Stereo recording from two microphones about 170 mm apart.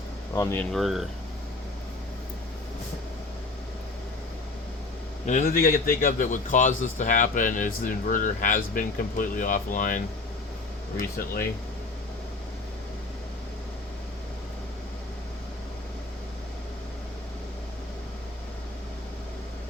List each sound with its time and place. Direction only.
0.3 s speech: 10° left (ahead or behind)
5.2 s a man's voice: 45° left (ahead or behind)
5.5 s a man's voice: 60° left (ahead or behind)